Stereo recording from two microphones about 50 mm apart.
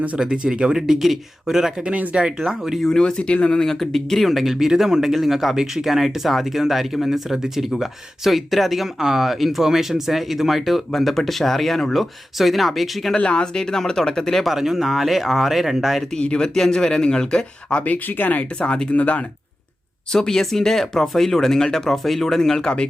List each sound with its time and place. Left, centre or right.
0.2 s speech: centre
0.8 s speech: centre
1.8 s speech: right
2.7 s speech: centre
3.0 s speech: centre
3.8 s speech: centre
13.1 s speech: centre
14.4 s speech: centre
16.2 s speech: left
16.6 s speech: centre
17.8 s speech: left
20.1 s speech: centre